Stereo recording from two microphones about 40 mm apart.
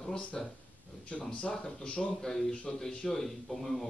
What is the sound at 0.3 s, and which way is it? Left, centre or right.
Speech, centre.